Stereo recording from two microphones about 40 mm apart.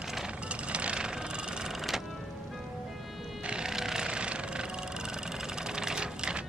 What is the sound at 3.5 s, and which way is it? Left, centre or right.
Vehicle, centre.